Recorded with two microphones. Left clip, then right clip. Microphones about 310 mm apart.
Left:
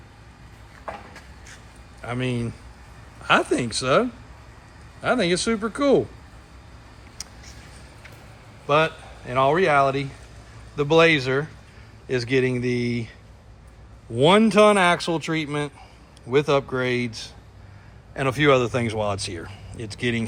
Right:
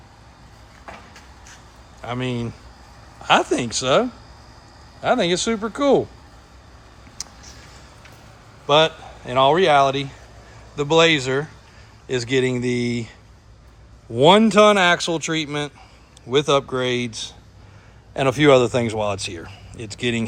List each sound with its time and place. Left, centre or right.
2.0 s speech: centre
5.0 s speech: centre
7.2 s a sound: centre
8.6 s speech: centre
14.2 s speech: centre